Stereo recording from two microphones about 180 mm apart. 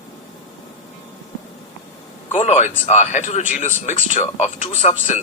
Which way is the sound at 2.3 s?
40° left (ahead or behind).